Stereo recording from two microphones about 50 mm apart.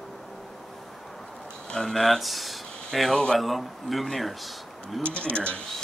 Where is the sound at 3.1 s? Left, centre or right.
Centre.